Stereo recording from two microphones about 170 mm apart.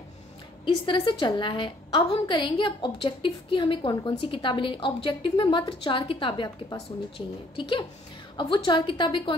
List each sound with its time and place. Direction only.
0.8 s a woman's voice: 30° left (ahead or behind)